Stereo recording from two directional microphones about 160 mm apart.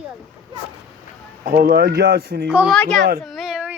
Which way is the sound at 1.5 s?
70° right (ahead or behind).